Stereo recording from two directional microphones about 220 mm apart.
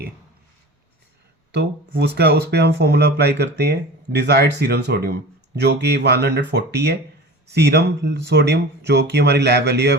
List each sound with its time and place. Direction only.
1.5 s speech: 50° right (ahead or behind)